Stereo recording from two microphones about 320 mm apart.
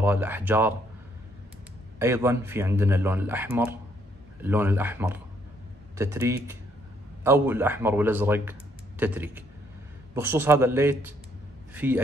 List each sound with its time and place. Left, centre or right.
0.0 s a man's voice: centre
2.0 s a man's voice: centre